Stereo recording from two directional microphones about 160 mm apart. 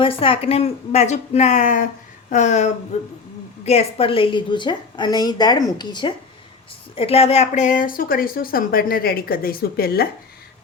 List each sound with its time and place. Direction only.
0.0 s a woman's voice: 35° left (ahead or behind)
3.7 s a woman's voice: 40° left (ahead or behind); by 10.1 s 75° left (ahead or behind)